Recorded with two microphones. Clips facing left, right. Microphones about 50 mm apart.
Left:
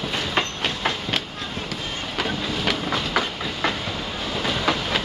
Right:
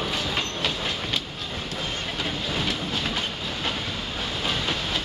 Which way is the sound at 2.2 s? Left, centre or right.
Left.